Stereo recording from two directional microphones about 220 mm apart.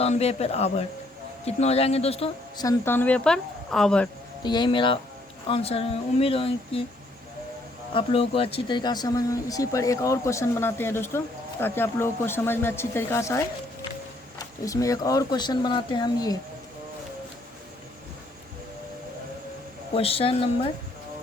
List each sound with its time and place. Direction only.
0.0 s speech: 30° left (ahead or behind); by 4.1 s 5° left (ahead or behind)
4.4 s speech: 20° left (ahead or behind)
7.9 s speech: 25° left (ahead or behind)
19.9 s speech: 25° left (ahead or behind)